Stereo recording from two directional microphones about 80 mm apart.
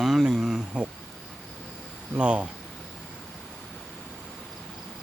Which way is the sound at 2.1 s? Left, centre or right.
Centre.